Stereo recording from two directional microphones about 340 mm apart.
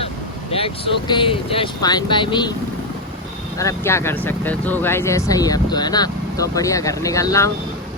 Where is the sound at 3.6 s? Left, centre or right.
Centre.